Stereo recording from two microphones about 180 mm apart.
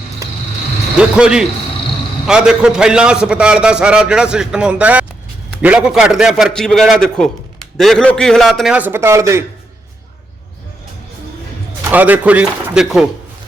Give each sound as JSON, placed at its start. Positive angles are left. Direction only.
{"t": 0.2, "sound": "vehicle", "side_deg": -20}
{"t": 0.9, "sound": "a man's voice", "side_deg": -5}
{"t": 11.8, "sound": "speech", "side_deg": -10}